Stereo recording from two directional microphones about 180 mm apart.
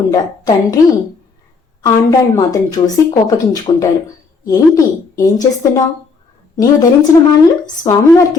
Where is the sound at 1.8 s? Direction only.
20° left (ahead or behind).